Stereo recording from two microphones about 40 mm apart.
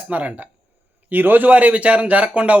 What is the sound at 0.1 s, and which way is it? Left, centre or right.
Speech, right.